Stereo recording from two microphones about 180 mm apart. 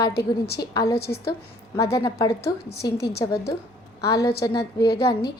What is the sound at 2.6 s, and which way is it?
Speech, 60° left (ahead or behind).